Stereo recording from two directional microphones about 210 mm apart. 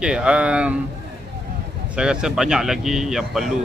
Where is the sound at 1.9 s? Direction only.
5° right (ahead or behind).